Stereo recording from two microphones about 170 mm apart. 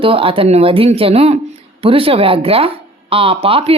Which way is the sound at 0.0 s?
30° right (ahead or behind).